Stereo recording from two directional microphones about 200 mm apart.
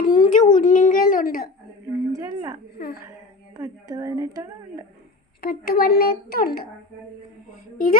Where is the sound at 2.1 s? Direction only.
15° right (ahead or behind).